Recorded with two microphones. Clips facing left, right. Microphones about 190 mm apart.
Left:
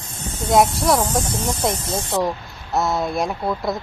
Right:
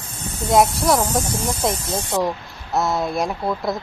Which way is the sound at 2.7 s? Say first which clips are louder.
Even; centre (ahead or behind).